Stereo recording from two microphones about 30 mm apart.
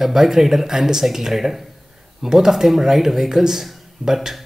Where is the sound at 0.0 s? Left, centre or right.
Centre.